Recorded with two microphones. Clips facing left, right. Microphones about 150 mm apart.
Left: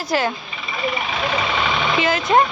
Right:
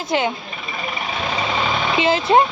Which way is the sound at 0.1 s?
20° right (ahead or behind).